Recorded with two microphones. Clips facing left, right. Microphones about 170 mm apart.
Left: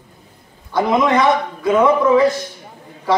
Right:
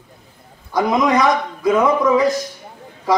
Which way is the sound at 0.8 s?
25° left (ahead or behind).